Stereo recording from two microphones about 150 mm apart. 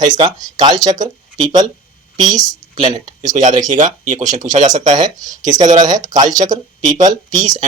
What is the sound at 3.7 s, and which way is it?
Speech, 55° right (ahead or behind).